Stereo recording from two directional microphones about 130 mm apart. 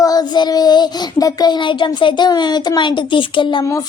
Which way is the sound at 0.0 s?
30° left (ahead or behind).